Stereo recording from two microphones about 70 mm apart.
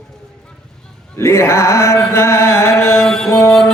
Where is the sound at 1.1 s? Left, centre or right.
Left.